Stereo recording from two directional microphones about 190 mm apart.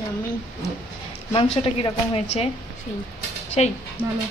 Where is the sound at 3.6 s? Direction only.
35° left (ahead or behind).